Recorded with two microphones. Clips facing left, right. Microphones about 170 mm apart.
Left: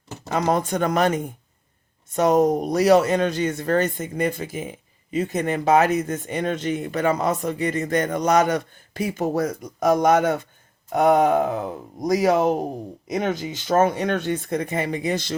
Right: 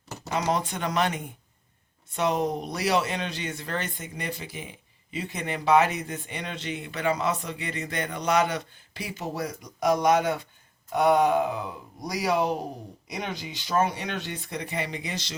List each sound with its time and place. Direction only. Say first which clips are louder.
0.3 s speech: left 5 dB; 50° left (ahead or behind)